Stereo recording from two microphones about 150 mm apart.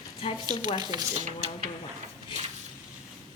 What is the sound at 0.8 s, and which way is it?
Speech, 25° right (ahead or behind).